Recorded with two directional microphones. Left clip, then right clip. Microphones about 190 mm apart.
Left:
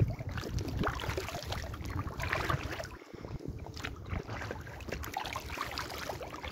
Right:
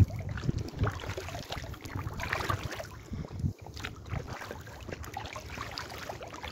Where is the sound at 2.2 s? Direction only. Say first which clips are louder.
Right 1 dB; 50° right (ahead or behind).